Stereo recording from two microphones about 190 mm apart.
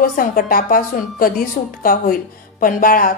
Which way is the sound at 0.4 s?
50° left (ahead or behind).